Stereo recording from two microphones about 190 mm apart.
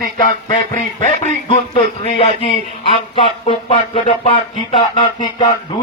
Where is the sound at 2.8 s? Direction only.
25° left (ahead or behind).